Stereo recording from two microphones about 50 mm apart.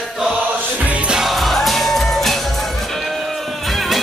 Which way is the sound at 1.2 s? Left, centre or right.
Centre.